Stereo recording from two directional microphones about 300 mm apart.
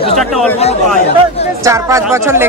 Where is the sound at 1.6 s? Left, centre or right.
Centre.